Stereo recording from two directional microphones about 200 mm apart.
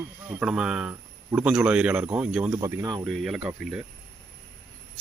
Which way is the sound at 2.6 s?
15° right (ahead or behind).